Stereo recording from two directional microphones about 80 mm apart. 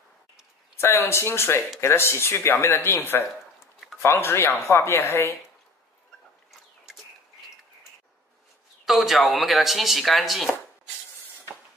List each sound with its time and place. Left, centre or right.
0.7 s speech: left
8.8 s speech: centre